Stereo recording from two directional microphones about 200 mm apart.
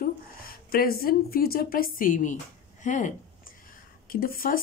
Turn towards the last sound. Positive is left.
turn(degrees=45)  # may be behind; listen again after turning